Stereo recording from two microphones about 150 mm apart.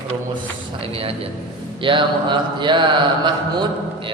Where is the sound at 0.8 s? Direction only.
40° right (ahead or behind).